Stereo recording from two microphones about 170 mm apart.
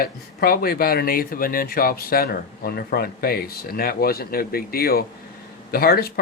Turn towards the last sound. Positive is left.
turn(degrees=60)  # may be behind; listen again after turning